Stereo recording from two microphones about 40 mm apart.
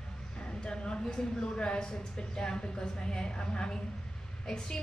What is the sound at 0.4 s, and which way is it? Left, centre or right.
A woman's voice, left.